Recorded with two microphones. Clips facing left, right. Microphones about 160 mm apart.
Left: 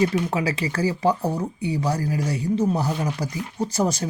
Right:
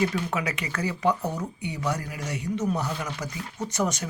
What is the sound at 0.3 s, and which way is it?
Speech, 30° left (ahead or behind).